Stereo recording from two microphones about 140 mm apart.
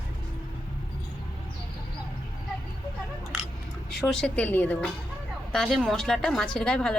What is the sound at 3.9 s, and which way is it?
A woman's voice, 5° left (ahead or behind).